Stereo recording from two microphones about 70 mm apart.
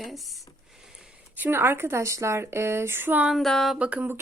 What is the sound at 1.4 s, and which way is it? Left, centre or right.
Speech, right.